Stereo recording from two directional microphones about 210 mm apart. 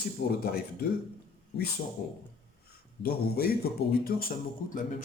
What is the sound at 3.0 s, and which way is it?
Speech, 45° left (ahead or behind).